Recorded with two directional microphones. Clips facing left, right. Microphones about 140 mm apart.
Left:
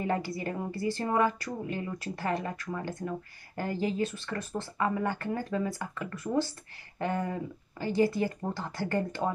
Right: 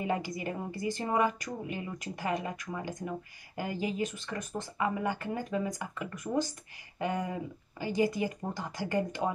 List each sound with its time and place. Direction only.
0.0 s a woman's voice: 15° right (ahead or behind)